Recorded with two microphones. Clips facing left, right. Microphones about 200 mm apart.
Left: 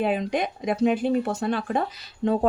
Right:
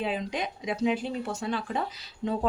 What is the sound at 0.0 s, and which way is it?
A woman's voice, 55° left (ahead or behind).